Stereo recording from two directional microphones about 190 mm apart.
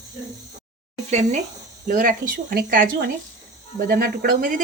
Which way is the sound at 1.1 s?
35° right (ahead or behind).